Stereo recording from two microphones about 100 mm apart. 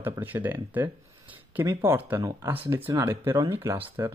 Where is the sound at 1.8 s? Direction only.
20° right (ahead or behind).